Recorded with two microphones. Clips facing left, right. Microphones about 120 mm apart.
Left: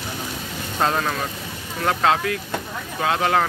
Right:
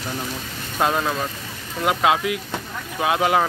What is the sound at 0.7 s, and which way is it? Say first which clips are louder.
Speech: right 1 dB; 10° right (ahead or behind).